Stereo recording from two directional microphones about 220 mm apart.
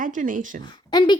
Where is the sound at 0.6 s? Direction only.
20° left (ahead or behind).